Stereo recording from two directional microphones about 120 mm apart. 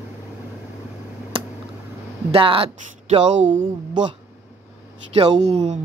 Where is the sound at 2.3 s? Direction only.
50° right (ahead or behind).